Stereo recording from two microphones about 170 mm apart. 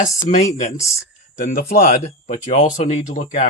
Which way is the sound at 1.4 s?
60° left (ahead or behind).